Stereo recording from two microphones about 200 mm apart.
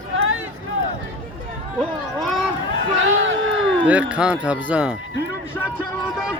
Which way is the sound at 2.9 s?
70° right (ahead or behind).